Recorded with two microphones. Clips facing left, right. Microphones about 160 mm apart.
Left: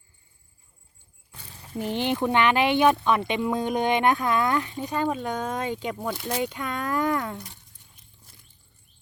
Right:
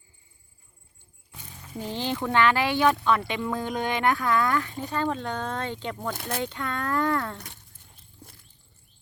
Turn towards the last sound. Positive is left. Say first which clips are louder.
# left 1 dB
turn(degrees=15)  # may be behind; listen again after turning